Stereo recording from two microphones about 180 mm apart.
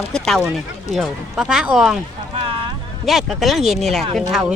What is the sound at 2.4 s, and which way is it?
Boat, 30° right (ahead or behind).